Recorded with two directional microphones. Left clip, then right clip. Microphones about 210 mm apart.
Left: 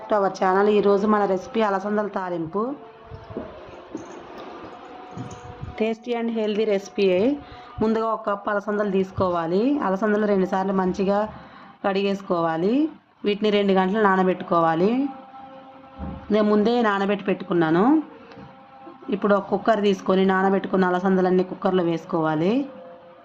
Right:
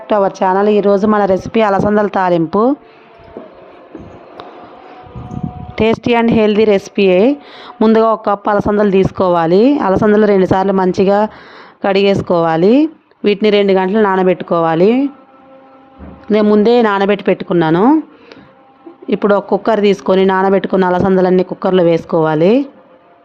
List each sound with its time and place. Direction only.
0.1 s speech: 40° right (ahead or behind)
5.7 s speech: 45° right (ahead or behind)
16.3 s speech: 40° right (ahead or behind)
19.1 s speech: 45° right (ahead or behind)